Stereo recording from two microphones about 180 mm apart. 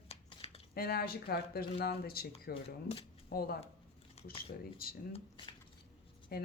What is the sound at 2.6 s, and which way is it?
Speech, 35° left (ahead or behind).